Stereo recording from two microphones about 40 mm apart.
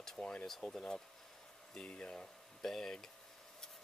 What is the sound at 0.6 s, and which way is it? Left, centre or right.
Speech, left.